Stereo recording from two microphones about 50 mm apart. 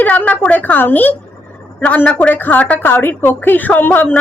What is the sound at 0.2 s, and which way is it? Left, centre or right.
A woman's voice, left.